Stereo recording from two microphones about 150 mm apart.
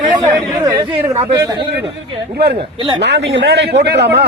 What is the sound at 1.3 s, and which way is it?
Speech, 30° right (ahead or behind).